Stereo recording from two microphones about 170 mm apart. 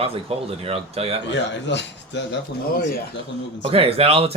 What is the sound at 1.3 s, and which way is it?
Speech, 90° left.